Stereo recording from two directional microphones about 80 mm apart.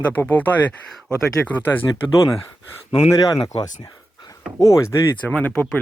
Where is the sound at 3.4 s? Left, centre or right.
Left.